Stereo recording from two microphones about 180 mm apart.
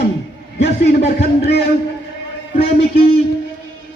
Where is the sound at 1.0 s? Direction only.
35° left (ahead or behind).